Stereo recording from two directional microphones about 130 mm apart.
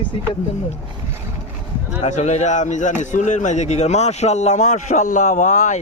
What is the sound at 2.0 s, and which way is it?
Speech, 60° left (ahead or behind).